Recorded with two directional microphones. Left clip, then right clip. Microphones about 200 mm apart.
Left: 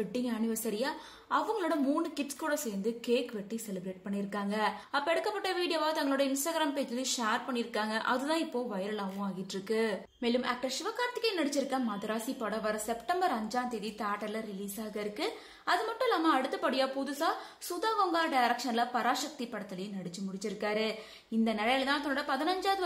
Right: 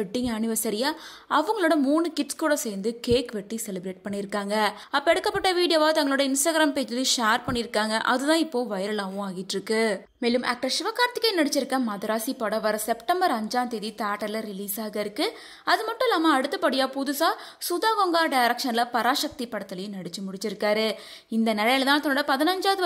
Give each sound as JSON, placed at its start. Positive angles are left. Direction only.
{"t": 0.1, "sound": "a woman's voice", "side_deg": -45}